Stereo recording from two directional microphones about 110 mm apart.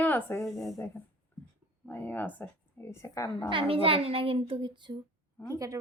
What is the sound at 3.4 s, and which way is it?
A child's voice, 55° right (ahead or behind).